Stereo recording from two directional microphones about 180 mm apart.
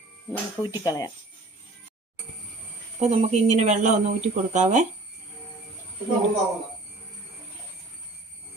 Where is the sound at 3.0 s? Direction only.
35° right (ahead or behind).